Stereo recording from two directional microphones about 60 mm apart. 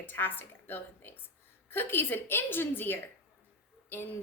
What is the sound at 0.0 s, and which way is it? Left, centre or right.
A woman's voice, left.